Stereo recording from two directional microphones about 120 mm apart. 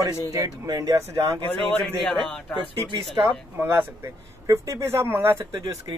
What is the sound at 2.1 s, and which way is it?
Speech, 5° left (ahead or behind).